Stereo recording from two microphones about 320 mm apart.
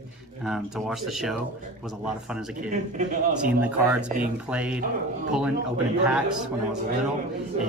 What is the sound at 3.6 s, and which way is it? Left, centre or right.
Speech, centre.